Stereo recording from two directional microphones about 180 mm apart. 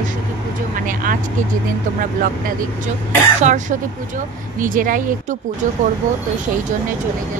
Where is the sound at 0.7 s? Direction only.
50° right (ahead or behind).